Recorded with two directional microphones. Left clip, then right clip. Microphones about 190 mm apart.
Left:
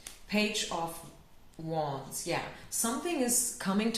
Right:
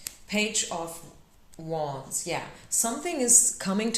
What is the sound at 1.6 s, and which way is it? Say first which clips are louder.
Speech: right 4 dB; 45° right (ahead or behind).